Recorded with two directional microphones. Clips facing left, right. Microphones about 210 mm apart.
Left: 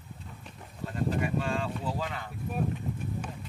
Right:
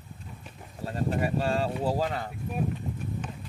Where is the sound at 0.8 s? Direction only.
35° right (ahead or behind).